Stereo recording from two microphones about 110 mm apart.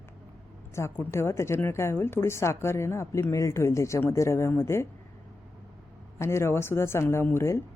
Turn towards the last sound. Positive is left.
turn(degrees=25)  # may be behind; listen again after turning